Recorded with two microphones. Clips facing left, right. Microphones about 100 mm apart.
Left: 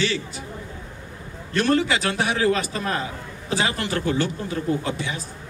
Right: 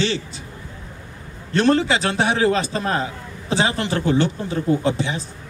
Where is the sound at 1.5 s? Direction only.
30° right (ahead or behind).